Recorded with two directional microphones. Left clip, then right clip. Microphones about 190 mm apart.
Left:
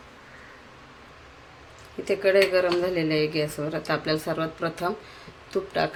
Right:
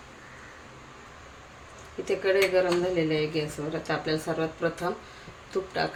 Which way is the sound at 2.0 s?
35° left (ahead or behind).